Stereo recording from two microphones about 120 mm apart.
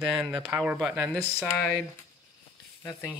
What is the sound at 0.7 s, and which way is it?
Speech, centre (ahead or behind).